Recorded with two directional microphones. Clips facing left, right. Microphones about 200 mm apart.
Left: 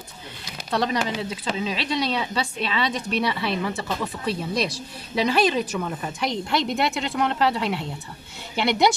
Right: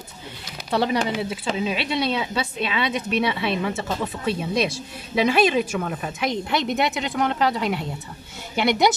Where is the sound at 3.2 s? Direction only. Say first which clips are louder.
Right 2 dB; 20° right (ahead or behind).